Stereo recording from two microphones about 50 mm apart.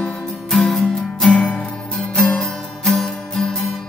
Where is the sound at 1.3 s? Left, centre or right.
Left.